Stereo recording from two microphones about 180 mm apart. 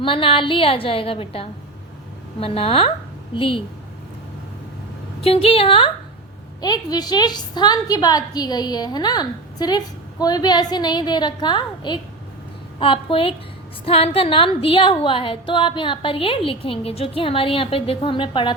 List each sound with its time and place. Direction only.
0.0 s a woman's voice: 30° left (ahead or behind)
5.2 s a woman's voice: 35° left (ahead or behind)